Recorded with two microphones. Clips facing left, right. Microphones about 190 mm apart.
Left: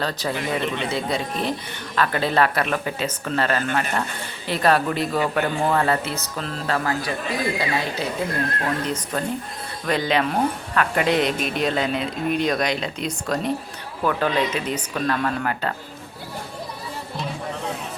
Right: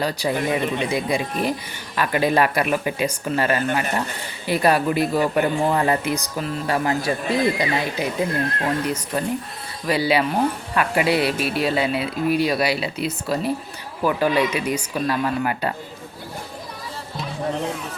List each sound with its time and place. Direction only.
0.0 s speech: 10° right (ahead or behind)
7.0 s speech: 25° right (ahead or behind)
8.6 s speech: 10° right (ahead or behind)